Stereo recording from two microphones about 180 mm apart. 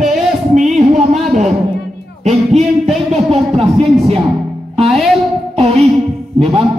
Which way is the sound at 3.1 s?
35° right (ahead or behind).